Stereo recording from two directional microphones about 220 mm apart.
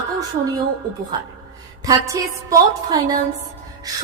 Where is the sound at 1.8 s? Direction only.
15° right (ahead or behind).